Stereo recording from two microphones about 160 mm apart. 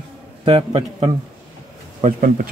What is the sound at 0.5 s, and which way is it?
Speech, 40° right (ahead or behind).